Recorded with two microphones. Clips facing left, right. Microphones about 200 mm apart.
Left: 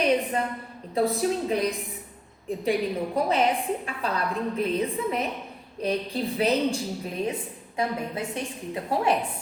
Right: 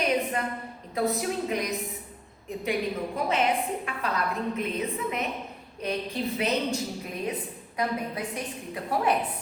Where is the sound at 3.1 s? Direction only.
35° left (ahead or behind).